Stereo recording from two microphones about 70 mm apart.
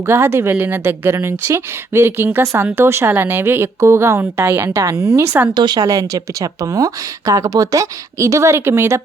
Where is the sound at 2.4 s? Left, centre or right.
Right.